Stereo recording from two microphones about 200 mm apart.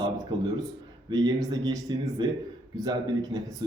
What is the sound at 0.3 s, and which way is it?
A man's voice, 20° right (ahead or behind).